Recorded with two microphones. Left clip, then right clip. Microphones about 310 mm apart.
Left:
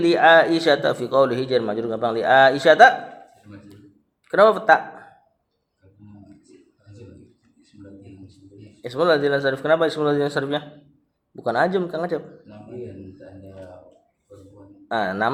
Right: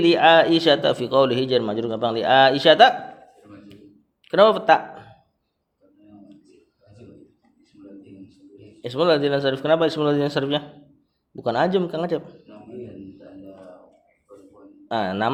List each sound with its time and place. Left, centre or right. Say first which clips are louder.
0.0 s a man's voice: left 1 dB; right
4.3 s speech: left 1 dB; right
8.9 s a man's voice: left 1 dB; right
14.8 s a man's voice: left 1 dB; right